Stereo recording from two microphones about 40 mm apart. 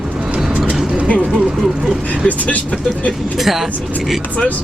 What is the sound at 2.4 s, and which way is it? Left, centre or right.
Vehicle, left.